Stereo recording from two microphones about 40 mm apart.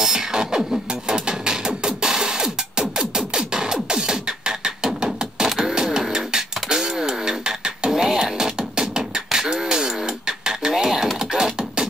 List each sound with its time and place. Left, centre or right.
0.0 s music: centre
11.1 s beatboxing: centre